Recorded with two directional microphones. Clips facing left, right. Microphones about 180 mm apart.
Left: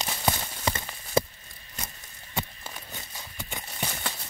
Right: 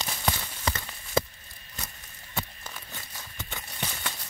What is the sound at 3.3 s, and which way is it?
Clip-clop, 10° left (ahead or behind).